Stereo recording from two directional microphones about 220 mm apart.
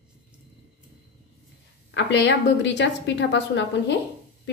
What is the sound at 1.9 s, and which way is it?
A woman's voice, 50° left (ahead or behind).